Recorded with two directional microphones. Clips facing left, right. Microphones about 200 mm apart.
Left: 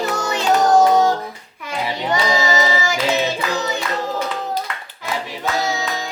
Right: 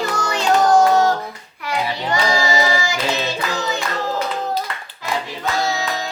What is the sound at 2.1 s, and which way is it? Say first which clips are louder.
Singing: even; 20° left (ahead or behind).